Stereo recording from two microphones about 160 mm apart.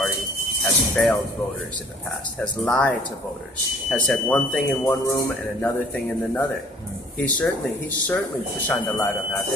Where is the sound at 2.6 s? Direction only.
5° left (ahead or behind).